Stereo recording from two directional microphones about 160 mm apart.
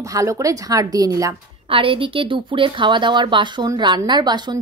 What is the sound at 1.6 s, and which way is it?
Speech, 35° right (ahead or behind).